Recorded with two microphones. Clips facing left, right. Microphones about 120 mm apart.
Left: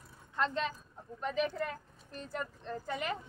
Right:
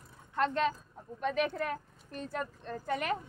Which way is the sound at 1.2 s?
70° right (ahead or behind).